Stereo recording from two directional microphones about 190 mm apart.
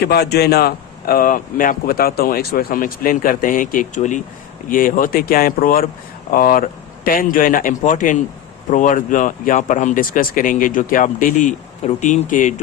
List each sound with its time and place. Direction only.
0.0 s speech: 60° left (ahead or behind); by 12.5 s 40° left (ahead or behind)